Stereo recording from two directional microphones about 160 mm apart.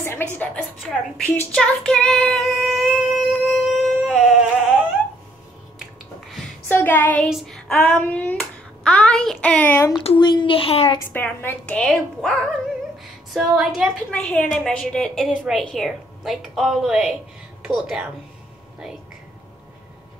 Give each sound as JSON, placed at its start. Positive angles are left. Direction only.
{"t": 0.0, "sound": "a woman's voice", "side_deg": 10}
{"t": 4.0, "sound": "a sound", "side_deg": -5}
{"t": 6.7, "sound": "a sound", "side_deg": 10}
{"t": 7.2, "sound": "a woman's voice", "side_deg": 0}
{"t": 10.0, "sound": "a child's voice", "side_deg": 30}
{"t": 11.0, "sound": "a woman's voice", "side_deg": 15}